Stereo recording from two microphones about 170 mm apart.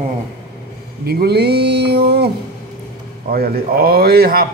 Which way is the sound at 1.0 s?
70° right (ahead or behind).